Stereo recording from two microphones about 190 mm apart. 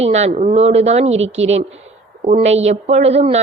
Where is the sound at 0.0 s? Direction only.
35° right (ahead or behind).